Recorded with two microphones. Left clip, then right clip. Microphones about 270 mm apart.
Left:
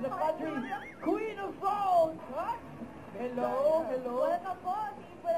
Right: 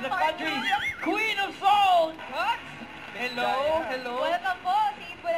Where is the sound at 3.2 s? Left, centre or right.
Centre.